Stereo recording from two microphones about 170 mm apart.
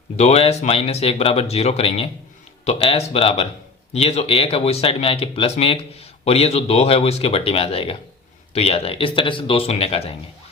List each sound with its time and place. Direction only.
0.2 s speech: 40° left (ahead or behind)